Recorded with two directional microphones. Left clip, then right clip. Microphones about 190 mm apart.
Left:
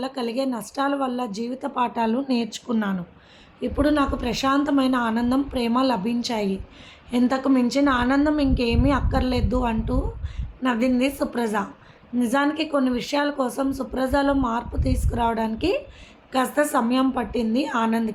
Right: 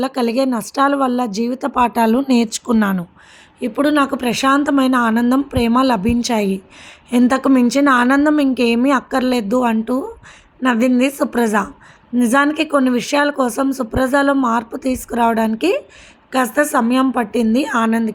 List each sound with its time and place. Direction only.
0.0 s speech: 40° right (ahead or behind)